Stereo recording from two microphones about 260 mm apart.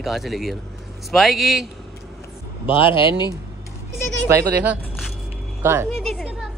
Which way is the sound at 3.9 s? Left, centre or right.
Centre.